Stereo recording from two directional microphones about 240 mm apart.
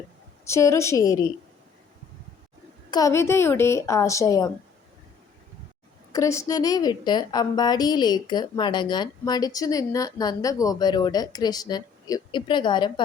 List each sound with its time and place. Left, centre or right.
0.4 s a woman's voice: centre
2.9 s a woman's voice: centre
6.1 s a woman's voice: centre